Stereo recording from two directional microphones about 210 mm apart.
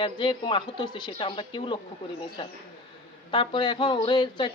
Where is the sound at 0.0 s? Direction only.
25° left (ahead or behind).